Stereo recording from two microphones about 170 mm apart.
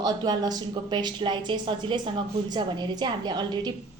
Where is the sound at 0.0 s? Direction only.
25° right (ahead or behind).